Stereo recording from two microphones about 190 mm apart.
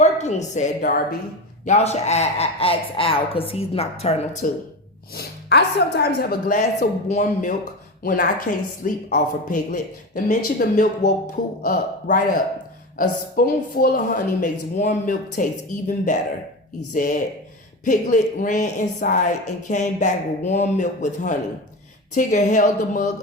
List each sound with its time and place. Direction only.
0.0 s a woman's voice: 35° left (ahead or behind)
1.6 s a woman's voice: 35° left (ahead or behind)
5.1 s a woman's voice: 60° left (ahead or behind)
6.6 s a woman's voice: 40° left (ahead or behind)